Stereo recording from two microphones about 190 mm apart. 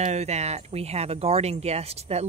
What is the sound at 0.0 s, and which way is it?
Speech, 35° right (ahead or behind).